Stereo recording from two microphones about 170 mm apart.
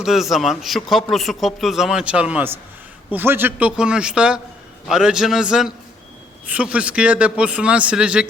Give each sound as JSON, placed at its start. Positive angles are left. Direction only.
{"t": 0.0, "sound": "a man's voice", "side_deg": 0}